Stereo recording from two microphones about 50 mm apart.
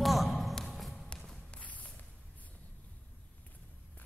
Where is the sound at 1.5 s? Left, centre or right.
Left.